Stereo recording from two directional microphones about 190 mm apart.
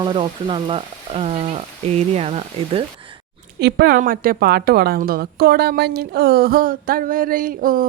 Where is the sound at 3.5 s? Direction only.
55° right (ahead or behind).